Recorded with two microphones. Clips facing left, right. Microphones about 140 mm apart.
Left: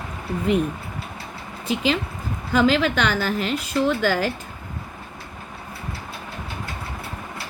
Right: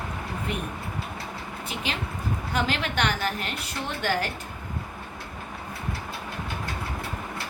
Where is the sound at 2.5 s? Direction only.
90° left.